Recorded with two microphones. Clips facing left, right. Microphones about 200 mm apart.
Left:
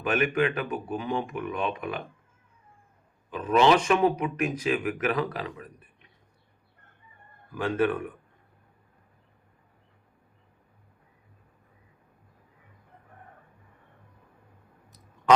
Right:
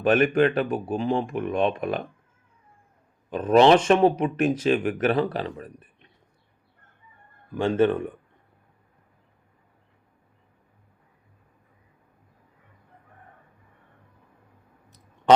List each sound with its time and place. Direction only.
0.0 s speech: 30° right (ahead or behind)
3.5 s speech: 35° right (ahead or behind)
7.5 s speech: 25° right (ahead or behind)